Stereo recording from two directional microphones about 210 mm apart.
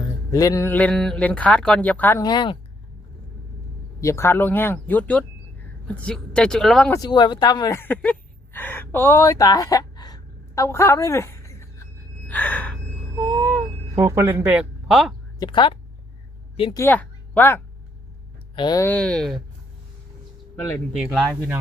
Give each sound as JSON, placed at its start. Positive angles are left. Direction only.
{"t": 0.3, "sound": "speech", "side_deg": 15}
{"t": 4.0, "sound": "speech", "side_deg": 10}
{"t": 6.9, "sound": "speech", "side_deg": 20}
{"t": 8.5, "sound": "gasp", "side_deg": 10}
{"t": 13.3, "sound": "a sound", "side_deg": -15}
{"t": 15.4, "sound": "speech", "side_deg": 25}
{"t": 16.7, "sound": "a woman's voice", "side_deg": 10}
{"t": 18.5, "sound": "speech", "side_deg": 20}
{"t": 20.9, "sound": "speech", "side_deg": -5}